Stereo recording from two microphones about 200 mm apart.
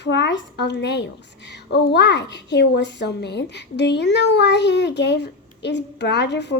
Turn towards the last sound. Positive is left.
turn(degrees=60)  # may be behind; listen again after turning